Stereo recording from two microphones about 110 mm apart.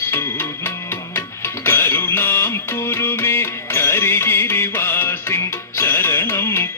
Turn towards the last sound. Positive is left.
turn(degrees=20)  # may be behind; listen again after turning